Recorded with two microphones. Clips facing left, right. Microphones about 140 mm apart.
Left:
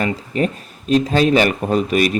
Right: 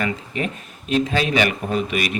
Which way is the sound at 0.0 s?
40° left (ahead or behind).